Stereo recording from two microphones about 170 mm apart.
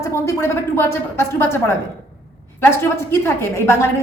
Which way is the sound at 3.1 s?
15° left (ahead or behind).